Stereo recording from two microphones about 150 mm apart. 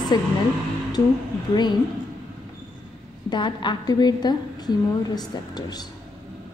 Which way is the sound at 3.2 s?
30° left (ahead or behind).